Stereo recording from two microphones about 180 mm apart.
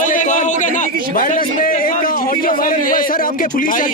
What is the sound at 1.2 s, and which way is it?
A man's voice, 50° left (ahead or behind).